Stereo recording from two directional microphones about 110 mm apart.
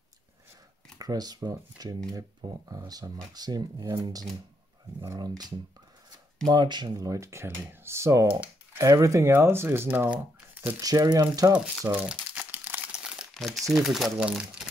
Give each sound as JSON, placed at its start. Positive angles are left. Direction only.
{"t": 0.9, "sound": "speech", "side_deg": -35}
{"t": 6.4, "sound": "speech", "side_deg": -40}
{"t": 8.8, "sound": "speech", "side_deg": -30}
{"t": 10.8, "sound": "speech", "side_deg": -35}
{"t": 11.9, "sound": "crumpling", "side_deg": -10}
{"t": 13.3, "sound": "speech", "side_deg": 0}